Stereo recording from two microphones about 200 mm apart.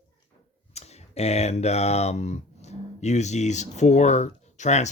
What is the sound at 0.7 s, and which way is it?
Speech, 30° left (ahead or behind).